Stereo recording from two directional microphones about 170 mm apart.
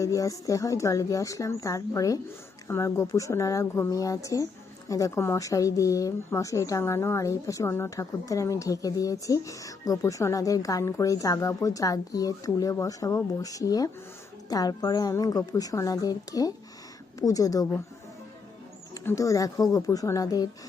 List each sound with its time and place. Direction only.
0.0 s speech: 20° left (ahead or behind)
19.0 s speech: 20° left (ahead or behind)